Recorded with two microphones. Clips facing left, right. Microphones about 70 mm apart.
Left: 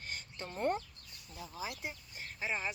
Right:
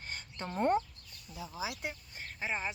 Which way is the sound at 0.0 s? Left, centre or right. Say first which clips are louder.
Right 2 dB; right.